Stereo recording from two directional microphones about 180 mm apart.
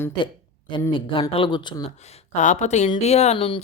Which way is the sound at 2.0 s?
40° left (ahead or behind).